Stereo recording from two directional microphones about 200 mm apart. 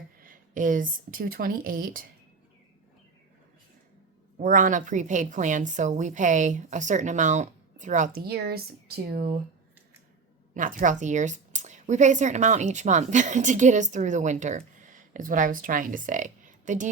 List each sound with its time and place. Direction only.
0.2 s speech: 45° right (ahead or behind)
4.4 s speech: 40° right (ahead or behind)
10.5 s speech: 40° right (ahead or behind)